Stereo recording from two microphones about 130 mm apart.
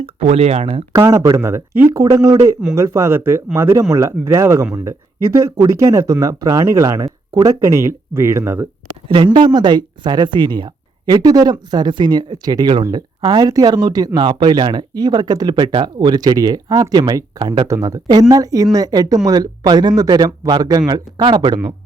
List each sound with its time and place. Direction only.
0.0 s speech: 55° right (ahead or behind)
0.9 s speech: 25° right (ahead or behind)
9.0 s speech: 40° right (ahead or behind)
17.7 s speech: 25° right (ahead or behind)